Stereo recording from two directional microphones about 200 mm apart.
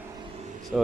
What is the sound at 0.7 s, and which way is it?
Speech, 5° right (ahead or behind).